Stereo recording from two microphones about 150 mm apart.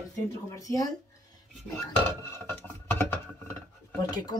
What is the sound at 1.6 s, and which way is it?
Speech, centre (ahead or behind).